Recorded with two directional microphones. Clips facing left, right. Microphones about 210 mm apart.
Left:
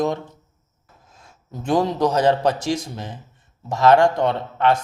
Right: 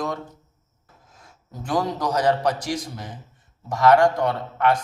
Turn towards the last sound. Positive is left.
turn(degrees=25)  # may be behind; listen again after turning